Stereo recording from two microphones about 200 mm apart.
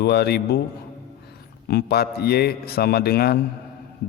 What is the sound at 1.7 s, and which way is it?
A man's voice, 55° left (ahead or behind).